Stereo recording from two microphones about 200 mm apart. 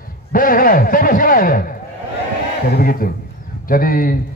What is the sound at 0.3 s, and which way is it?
A man's voice, 45° left (ahead or behind).